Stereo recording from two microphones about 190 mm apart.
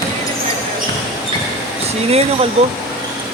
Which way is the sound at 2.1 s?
35° right (ahead or behind).